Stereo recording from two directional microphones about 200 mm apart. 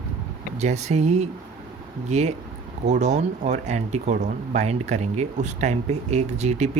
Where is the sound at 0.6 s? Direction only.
35° right (ahead or behind).